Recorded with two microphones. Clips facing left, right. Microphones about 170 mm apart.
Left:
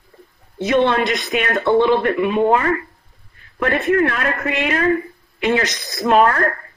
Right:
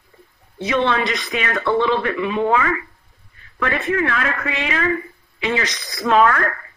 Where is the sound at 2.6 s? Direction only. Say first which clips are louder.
Left 2 dB; 40° left (ahead or behind).